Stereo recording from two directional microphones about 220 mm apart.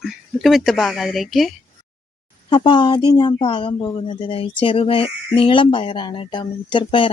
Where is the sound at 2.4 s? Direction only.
20° left (ahead or behind).